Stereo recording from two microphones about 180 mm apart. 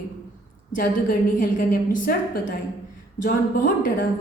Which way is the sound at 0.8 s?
50° left (ahead or behind).